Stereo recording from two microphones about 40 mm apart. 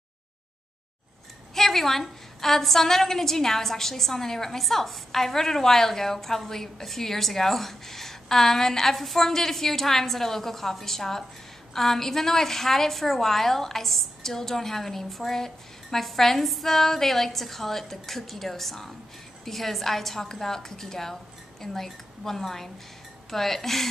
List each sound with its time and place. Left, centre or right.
1.5 s a woman's voice: centre